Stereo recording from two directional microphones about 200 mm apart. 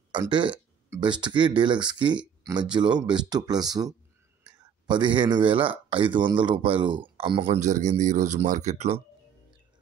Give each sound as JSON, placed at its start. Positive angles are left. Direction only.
{"t": 0.1, "sound": "speech", "side_deg": -25}